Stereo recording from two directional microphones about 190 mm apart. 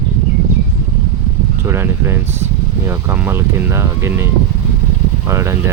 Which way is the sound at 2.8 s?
15° right (ahead or behind).